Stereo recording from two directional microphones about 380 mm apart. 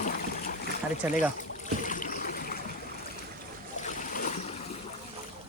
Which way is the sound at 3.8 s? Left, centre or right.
Left.